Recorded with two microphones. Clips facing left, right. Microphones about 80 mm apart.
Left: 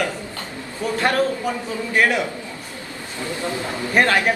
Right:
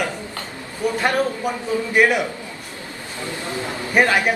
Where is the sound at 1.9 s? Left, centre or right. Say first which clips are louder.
Right 2 dB; centre.